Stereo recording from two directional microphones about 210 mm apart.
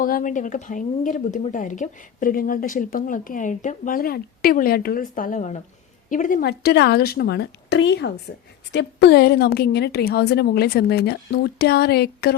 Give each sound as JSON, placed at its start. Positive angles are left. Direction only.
{"t": 0.0, "sound": "a woman's voice", "side_deg": 40}